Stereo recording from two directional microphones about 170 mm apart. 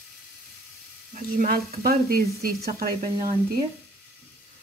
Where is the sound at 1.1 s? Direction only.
55° right (ahead or behind).